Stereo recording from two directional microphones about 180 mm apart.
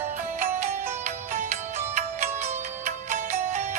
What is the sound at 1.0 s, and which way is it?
Music, 40° right (ahead or behind).